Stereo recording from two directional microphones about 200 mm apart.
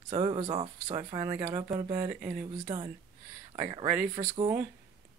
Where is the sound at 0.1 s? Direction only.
25° right (ahead or behind).